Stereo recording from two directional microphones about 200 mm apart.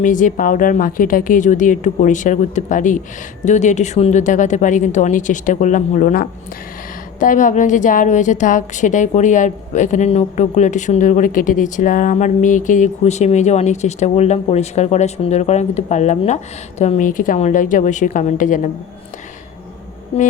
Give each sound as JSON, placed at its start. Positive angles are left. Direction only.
{"t": 0.0, "sound": "a woman's voice", "side_deg": 40}
{"t": 20.1, "sound": "a woman's voice", "side_deg": 30}